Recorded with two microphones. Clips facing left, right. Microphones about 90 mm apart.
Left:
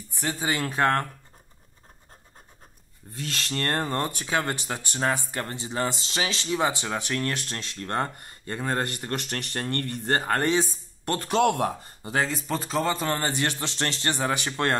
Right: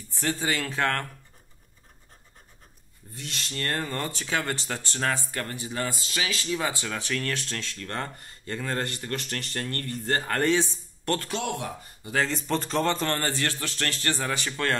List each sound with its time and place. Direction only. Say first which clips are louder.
0.1 s speech: even; 15° left (ahead or behind)
3.2 s speech: left 4 dB; 45° left (ahead or behind)
4.1 s speech: left 2 dB; 15° left (ahead or behind); by 9.8 s 30° left (ahead or behind)
11.1 s speech: right 1 dB; 20° left (ahead or behind)
11.3 s speech: left 9 dB; 50° left (ahead or behind)
12.3 s speech: right 1 dB; 5° left (ahead or behind)
13.2 s speech: left 2 dB; 20° left (ahead or behind)